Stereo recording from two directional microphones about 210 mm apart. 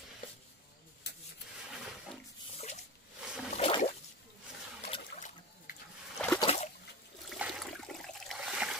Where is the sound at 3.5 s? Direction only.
30° left (ahead or behind).